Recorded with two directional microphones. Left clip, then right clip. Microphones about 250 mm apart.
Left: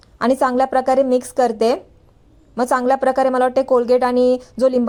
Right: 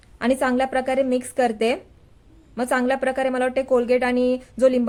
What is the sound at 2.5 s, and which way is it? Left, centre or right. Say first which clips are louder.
Speech: left 5 dB; centre.